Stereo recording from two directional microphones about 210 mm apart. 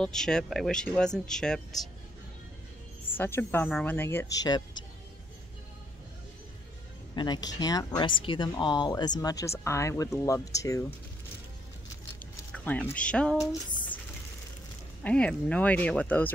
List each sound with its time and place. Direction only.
0.0 s speech: 5° left (ahead or behind)
3.2 s speech: 10° left (ahead or behind)
7.2 s speech: 20° left (ahead or behind)
12.6 s speech: 5° left (ahead or behind)
13.4 s a sound: 15° left (ahead or behind)
15.0 s speech: 5° left (ahead or behind)